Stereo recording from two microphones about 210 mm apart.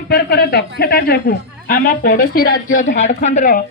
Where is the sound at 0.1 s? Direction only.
50° left (ahead or behind).